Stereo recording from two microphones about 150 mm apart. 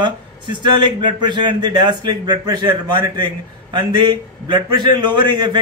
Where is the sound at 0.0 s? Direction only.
30° right (ahead or behind).